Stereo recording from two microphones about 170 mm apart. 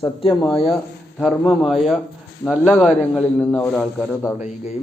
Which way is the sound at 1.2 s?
Centre (ahead or behind).